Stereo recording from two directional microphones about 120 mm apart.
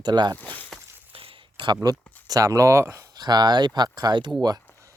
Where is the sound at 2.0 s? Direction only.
15° left (ahead or behind).